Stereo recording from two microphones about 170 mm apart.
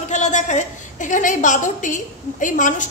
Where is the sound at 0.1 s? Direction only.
45° left (ahead or behind).